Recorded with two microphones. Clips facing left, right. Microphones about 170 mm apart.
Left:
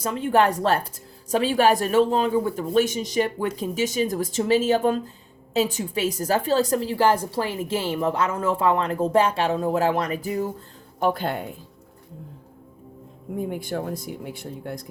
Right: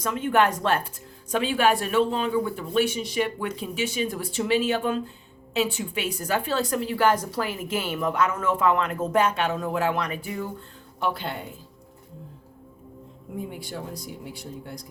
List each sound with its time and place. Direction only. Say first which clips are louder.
0.0 s a woman's voice: left 2 dB; 35° left (ahead or behind)
11.0 s speech: left 5 dB; 50° left (ahead or behind)
13.5 s speech: left 7 dB; 50° left (ahead or behind)